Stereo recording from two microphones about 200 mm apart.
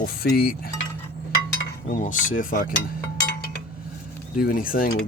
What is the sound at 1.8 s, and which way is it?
Speech, 40° left (ahead or behind).